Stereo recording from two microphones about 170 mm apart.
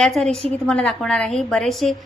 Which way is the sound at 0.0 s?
5° left (ahead or behind).